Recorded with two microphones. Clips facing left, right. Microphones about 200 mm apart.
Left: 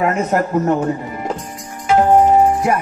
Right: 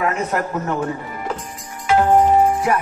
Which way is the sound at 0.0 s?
40° left (ahead or behind).